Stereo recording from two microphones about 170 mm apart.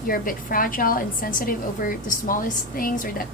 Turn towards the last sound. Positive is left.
turn(degrees=55)  # may be behind; listen again after turning